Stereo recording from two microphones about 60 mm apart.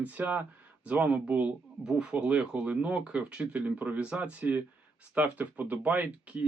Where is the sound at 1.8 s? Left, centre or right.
Centre.